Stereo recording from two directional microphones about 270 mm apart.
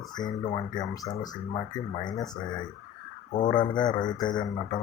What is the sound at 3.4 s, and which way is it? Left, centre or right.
Speech, centre.